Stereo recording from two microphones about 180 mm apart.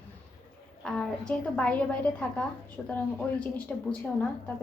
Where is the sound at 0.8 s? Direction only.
5° left (ahead or behind).